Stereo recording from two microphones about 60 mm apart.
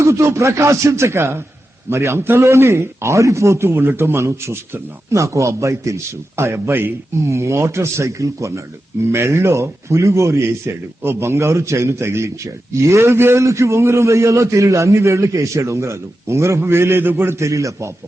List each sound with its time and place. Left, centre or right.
0.0 s a man's voice: right
17.4 s a man's voice: right